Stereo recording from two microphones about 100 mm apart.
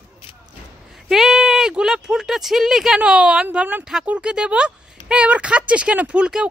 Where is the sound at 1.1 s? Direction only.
5° right (ahead or behind).